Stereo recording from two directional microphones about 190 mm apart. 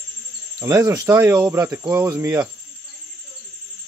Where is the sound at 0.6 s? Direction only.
20° right (ahead or behind).